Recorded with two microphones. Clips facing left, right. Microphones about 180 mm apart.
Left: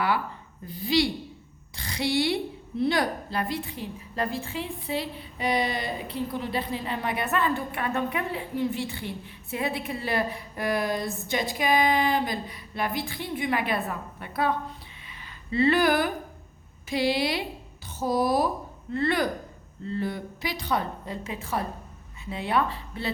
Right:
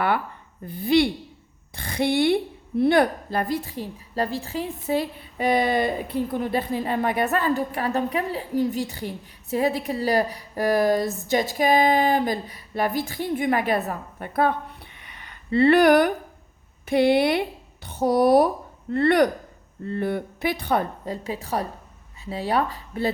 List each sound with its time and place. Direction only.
0.7 s a woman's voice: 55° right (ahead or behind)
3.7 s a woman's voice: 35° right (ahead or behind)